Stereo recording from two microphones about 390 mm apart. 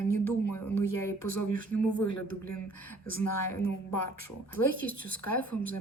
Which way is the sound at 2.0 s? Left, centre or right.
Left.